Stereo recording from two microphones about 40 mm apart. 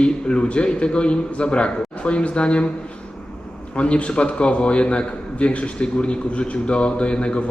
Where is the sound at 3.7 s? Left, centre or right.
Left.